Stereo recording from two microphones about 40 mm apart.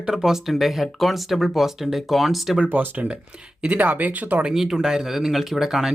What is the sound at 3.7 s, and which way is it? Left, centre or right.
Speech, right.